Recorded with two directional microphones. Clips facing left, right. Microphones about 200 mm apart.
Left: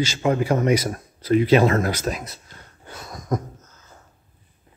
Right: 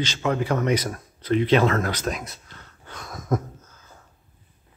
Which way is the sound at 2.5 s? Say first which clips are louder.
Left 2 dB; 10° left (ahead or behind).